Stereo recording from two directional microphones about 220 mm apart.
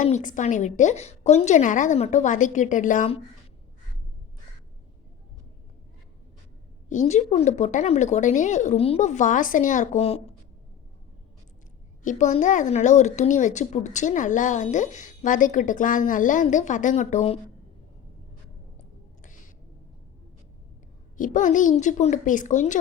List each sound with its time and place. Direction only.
0.0 s speech: 35° left (ahead or behind)
6.8 s speech: 35° left (ahead or behind)
12.0 s speech: 30° left (ahead or behind)
21.2 s speech: 35° left (ahead or behind)